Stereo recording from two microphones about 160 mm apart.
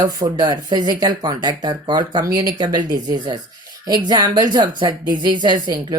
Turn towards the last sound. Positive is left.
turn(degrees=-25)  # may be behind; listen again after turning